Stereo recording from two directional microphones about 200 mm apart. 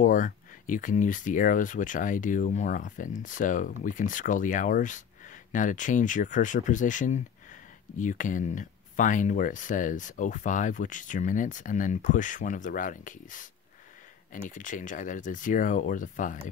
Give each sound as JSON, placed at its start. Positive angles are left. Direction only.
{"t": 0.0, "sound": "speech", "side_deg": 40}